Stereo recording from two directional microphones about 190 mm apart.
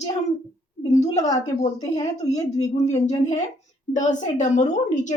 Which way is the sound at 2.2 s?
35° left (ahead or behind).